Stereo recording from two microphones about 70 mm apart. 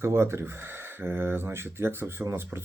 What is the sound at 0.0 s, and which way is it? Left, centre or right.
Speech, right.